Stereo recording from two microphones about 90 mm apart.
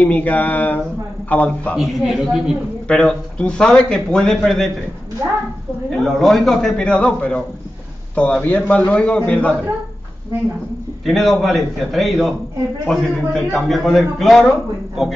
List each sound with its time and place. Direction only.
0.0 s a man's voice: 15° left (ahead or behind)
1.8 s a man's voice: 5° right (ahead or behind)
2.9 s a man's voice: 10° left (ahead or behind)
5.9 s a man's voice: centre (ahead or behind)
11.1 s a man's voice: centre (ahead or behind)